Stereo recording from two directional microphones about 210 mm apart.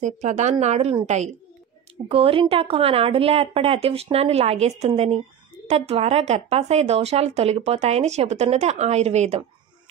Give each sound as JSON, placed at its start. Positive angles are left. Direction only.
{"t": 0.0, "sound": "speech", "side_deg": -35}